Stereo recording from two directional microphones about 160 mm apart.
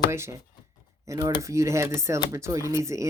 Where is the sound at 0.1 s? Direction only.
15° right (ahead or behind).